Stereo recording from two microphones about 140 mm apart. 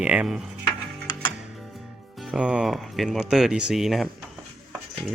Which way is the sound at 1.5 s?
Centre (ahead or behind).